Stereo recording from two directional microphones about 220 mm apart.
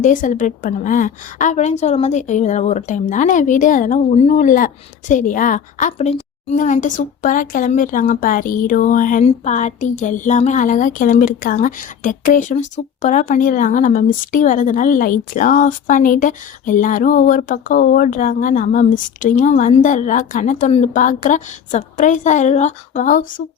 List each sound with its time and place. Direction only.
0.0 s speech: 35° left (ahead or behind)